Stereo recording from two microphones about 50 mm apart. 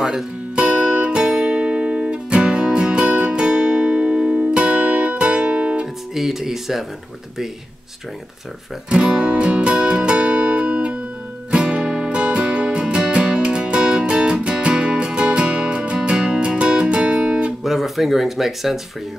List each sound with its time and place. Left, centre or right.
0.6 s music: right
6.1 s speech: centre
8.8 s music: right
17.6 s speech: centre